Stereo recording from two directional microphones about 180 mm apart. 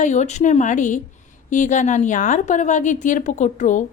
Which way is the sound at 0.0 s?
40° left (ahead or behind).